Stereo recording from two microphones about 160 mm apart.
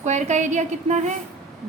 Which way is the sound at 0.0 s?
45° right (ahead or behind).